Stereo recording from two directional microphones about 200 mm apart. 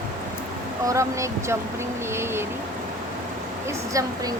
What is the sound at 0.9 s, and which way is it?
Speech, 15° right (ahead or behind).